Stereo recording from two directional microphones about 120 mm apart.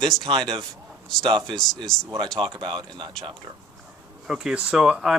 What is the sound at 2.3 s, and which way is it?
Speech, 40° right (ahead or behind).